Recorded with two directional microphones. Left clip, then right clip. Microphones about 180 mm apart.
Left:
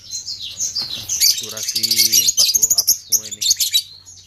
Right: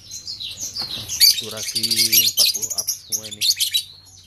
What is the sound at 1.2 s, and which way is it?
Speech, 10° right (ahead or behind).